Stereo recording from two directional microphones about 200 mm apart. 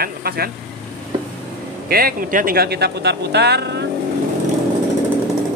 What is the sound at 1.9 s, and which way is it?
A man's voice, 45° right (ahead or behind).